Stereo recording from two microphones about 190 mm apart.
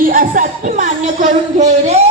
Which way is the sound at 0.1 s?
45° right (ahead or behind).